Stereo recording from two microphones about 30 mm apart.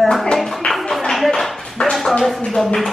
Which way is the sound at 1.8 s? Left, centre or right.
Left.